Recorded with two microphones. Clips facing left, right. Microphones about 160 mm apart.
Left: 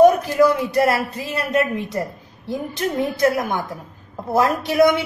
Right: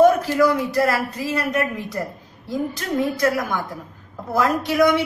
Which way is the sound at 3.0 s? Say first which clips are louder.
Left 1 dB; 25° left (ahead or behind).